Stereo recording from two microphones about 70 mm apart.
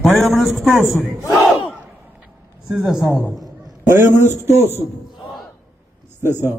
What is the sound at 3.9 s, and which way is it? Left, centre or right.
Speech, right.